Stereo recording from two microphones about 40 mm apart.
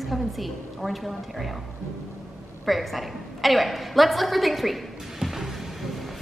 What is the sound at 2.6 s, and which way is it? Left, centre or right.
A woman's voice, centre.